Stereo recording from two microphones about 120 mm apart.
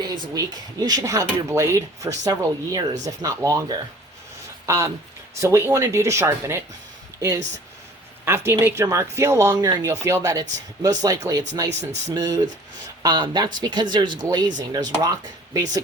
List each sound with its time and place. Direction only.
0.0 s speech: 35° right (ahead or behind)
8.2 s speech: 20° right (ahead or behind)
9.9 s speech: 20° right (ahead or behind)